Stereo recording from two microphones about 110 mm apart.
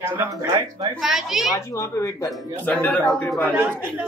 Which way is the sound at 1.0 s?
Centre (ahead or behind).